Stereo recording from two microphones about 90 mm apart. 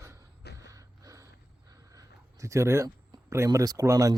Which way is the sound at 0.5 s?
35° right (ahead or behind).